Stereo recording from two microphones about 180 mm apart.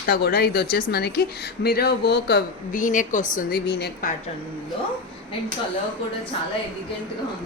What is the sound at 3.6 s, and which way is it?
Speech, 65° left (ahead or behind).